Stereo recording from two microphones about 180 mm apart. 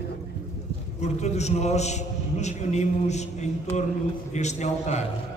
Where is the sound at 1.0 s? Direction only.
40° left (ahead or behind).